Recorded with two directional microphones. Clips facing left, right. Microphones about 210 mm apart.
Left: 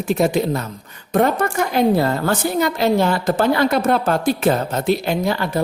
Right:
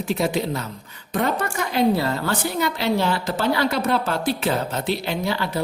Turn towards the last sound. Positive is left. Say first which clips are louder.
# left 5 dB
turn(degrees=45)  # may be behind; listen again after turning